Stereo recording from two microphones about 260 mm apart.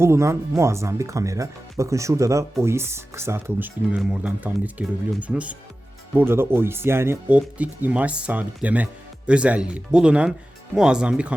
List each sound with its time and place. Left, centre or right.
0.0 s speech: centre